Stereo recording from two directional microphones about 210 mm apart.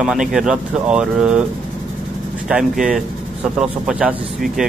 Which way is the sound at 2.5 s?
5° right (ahead or behind).